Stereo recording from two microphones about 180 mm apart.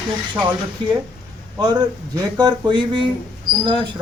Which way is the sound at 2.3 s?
25° right (ahead or behind).